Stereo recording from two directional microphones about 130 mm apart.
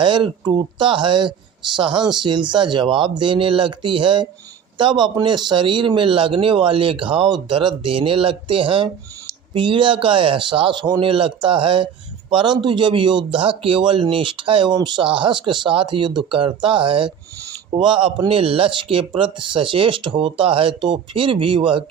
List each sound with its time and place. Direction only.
0.0 s speech: 35° right (ahead or behind)